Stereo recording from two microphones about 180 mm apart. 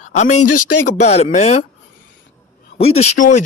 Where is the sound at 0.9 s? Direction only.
35° left (ahead or behind).